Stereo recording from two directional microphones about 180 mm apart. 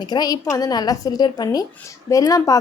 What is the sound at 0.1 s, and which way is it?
A woman's voice, 20° left (ahead or behind).